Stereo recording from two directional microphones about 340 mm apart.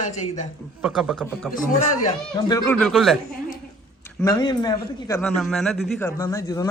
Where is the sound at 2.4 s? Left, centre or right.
Centre.